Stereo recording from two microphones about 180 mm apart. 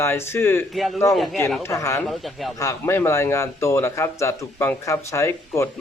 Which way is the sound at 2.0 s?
Centre (ahead or behind).